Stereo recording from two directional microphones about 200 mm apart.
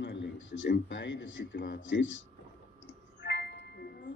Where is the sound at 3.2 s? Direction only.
60° left (ahead or behind).